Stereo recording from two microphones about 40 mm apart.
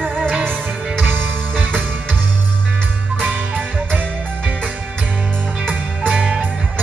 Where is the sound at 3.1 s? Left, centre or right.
Right.